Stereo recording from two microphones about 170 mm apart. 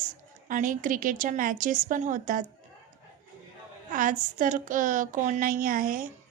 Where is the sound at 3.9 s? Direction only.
55° right (ahead or behind).